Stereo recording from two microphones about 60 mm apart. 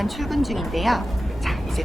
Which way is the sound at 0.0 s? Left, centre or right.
Centre.